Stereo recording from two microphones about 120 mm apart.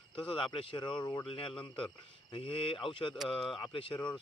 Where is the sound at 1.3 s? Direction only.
45° left (ahead or behind).